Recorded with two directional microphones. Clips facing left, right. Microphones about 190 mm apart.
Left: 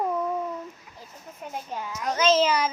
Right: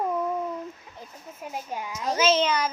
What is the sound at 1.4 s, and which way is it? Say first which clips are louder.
Speech: even; 10° right (ahead or behind).